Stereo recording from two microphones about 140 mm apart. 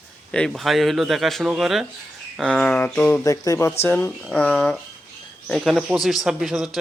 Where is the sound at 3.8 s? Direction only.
15° left (ahead or behind).